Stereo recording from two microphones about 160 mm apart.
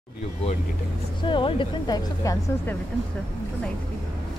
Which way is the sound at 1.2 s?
30° left (ahead or behind).